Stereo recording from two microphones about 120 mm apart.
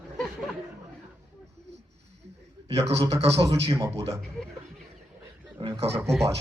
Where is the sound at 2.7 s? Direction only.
55° right (ahead or behind).